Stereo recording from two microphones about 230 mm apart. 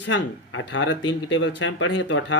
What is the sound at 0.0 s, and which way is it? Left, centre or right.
Speech, left.